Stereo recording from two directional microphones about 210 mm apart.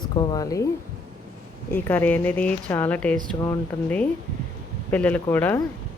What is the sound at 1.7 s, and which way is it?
Speech, 10° left (ahead or behind).